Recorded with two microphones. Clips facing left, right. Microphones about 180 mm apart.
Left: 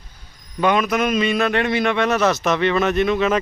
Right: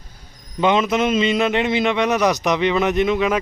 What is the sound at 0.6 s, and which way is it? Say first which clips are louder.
A man's voice: right 1 dB; 20° right (ahead or behind).